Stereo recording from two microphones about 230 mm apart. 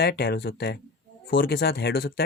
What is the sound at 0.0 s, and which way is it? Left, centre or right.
Speech, left.